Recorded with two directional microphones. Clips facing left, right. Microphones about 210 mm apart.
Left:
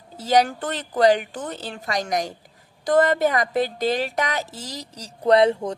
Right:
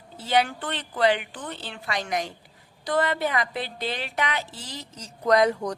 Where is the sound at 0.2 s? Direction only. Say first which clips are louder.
Left 5 dB; 40° left (ahead or behind).